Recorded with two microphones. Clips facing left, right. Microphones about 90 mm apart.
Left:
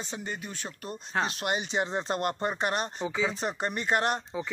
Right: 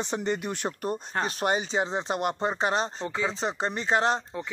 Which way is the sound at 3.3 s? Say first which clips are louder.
Right 2 dB; 25° right (ahead or behind).